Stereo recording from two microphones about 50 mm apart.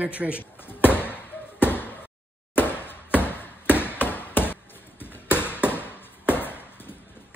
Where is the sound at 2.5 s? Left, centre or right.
Left.